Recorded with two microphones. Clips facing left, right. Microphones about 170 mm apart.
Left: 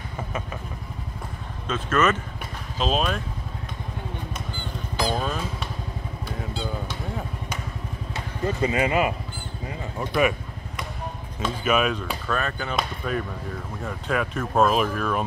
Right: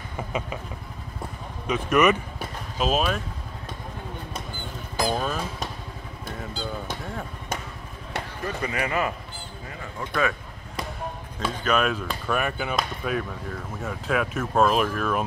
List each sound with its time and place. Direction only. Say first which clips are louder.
1.7 s speech: right 2 dB; 15° right (ahead or behind)
5.0 s music: even; 5° right (ahead or behind)
6.3 s vehicle: left 2 dB; centre (ahead or behind)
8.5 s speech: left 6 dB; 25° left (ahead or behind)
11.6 s speech: left 1 dB; 5° left (ahead or behind)
12.3 s speech: right 2 dB; 15° right (ahead or behind)
12.7 s speech: even; centre (ahead or behind)